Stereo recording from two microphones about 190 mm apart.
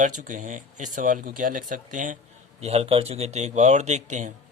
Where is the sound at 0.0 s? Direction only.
40° right (ahead or behind).